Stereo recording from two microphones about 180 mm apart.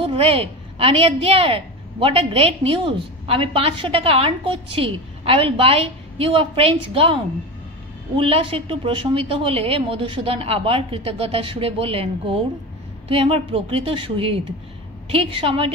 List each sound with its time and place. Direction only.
0.0 s a woman's voice: 30° right (ahead or behind)
8.2 s a woman's voice: 30° right (ahead or behind)